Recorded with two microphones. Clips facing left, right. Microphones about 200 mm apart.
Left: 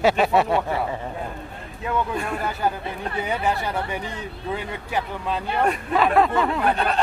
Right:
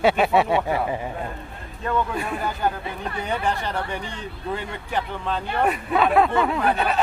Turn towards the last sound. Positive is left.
turn(degrees=-5)  # may be behind; listen again after turning